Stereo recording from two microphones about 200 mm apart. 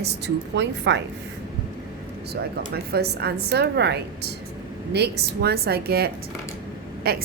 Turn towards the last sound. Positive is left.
turn(degrees=-50)  # may be behind; listen again after turning